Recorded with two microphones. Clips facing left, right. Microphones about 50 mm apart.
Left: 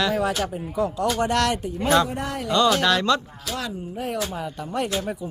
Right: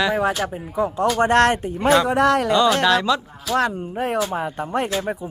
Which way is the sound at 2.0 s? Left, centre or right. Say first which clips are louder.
Right 12 dB; right.